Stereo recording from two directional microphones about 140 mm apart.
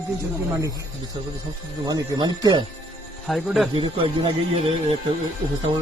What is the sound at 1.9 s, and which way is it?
Speech, 30° right (ahead or behind).